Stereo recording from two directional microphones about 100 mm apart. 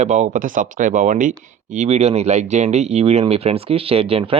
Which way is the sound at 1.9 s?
90° right.